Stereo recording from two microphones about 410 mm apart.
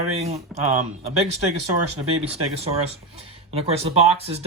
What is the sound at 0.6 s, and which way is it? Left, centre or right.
Speech, right.